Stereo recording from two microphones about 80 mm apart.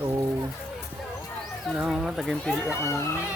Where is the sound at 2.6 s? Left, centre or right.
Left.